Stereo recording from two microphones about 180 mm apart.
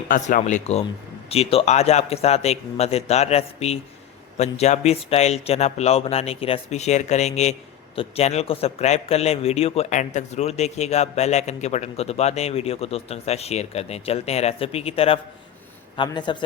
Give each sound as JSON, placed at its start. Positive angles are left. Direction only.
{"t": 0.1, "sound": "a man's voice", "side_deg": 45}